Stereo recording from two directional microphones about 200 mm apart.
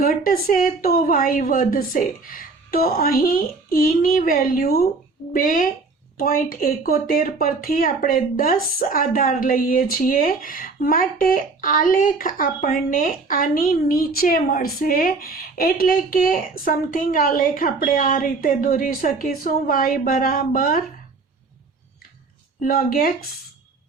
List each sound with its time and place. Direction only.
0.0 s speech: 45° left (ahead or behind)
22.6 s speech: 50° left (ahead or behind)